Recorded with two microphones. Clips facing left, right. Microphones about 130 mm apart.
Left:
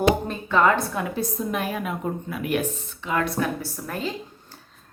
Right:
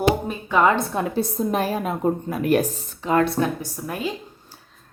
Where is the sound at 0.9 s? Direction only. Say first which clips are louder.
Right 4 dB; 35° right (ahead or behind).